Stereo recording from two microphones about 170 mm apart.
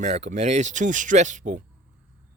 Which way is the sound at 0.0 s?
40° right (ahead or behind).